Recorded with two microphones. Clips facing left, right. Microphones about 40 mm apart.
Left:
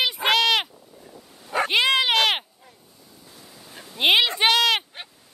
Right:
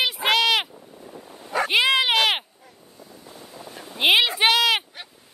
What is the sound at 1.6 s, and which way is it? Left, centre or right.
Dog, centre.